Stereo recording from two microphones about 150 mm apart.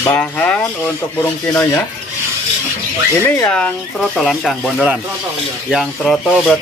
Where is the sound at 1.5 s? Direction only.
15° left (ahead or behind).